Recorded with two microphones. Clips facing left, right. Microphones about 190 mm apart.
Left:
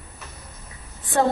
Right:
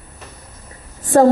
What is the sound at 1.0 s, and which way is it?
Speech, 40° right (ahead or behind).